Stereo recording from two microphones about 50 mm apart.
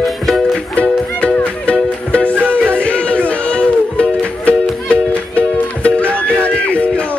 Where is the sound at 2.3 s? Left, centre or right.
Right.